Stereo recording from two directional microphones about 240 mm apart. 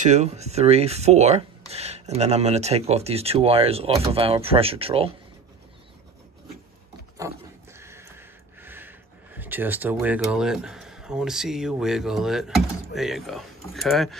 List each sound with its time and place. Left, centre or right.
0.0 s speech: right
7.2 s pig: centre
7.7 s speech: centre